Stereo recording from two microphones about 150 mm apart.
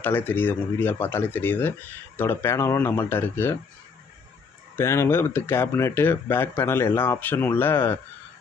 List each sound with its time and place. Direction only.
0.0 s speech: 15° left (ahead or behind)
4.7 s speech: 15° left (ahead or behind)